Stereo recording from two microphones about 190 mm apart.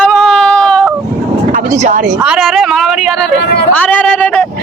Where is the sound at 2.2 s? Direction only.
5° right (ahead or behind).